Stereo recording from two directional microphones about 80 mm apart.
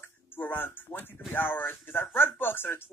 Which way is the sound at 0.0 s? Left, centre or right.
Left.